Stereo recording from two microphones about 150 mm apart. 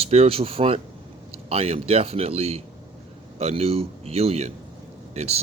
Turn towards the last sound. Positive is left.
turn(degrees=-45)  # may be behind; listen again after turning